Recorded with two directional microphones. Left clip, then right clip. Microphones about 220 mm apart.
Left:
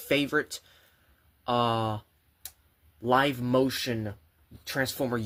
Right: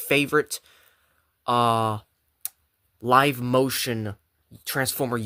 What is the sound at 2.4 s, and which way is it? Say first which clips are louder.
Tick-tock: right 6 dB; 45° right (ahead or behind).